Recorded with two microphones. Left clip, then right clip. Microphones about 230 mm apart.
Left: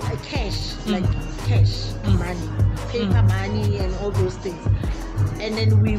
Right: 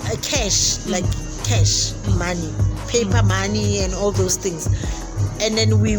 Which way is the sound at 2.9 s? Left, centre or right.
Right.